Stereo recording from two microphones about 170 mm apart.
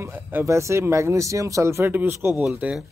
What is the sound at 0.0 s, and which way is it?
Speech, 10° right (ahead or behind).